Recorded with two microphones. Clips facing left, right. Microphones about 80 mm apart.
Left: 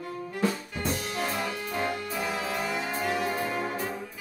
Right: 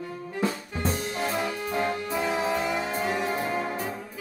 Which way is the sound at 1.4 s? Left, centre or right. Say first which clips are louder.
Right 3 dB; centre.